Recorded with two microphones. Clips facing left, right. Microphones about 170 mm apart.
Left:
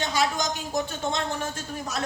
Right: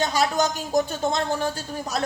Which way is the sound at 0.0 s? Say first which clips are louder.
Right 4 dB; 40° right (ahead or behind).